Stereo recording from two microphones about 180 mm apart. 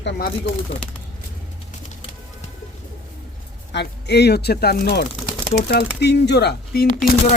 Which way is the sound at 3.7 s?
65° left (ahead or behind).